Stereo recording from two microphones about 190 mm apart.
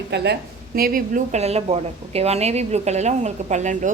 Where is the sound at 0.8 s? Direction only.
50° right (ahead or behind).